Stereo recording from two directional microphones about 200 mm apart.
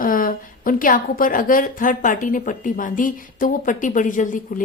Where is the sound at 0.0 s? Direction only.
45° left (ahead or behind).